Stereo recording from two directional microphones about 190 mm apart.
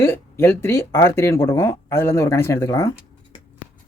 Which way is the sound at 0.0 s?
15° left (ahead or behind).